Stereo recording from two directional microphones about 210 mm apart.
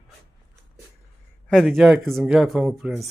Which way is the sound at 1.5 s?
Centre (ahead or behind).